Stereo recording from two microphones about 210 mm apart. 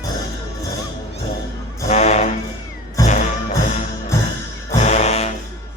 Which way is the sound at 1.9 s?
30° left (ahead or behind).